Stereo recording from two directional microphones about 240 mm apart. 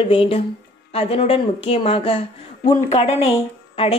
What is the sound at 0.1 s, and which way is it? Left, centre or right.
Speech, left.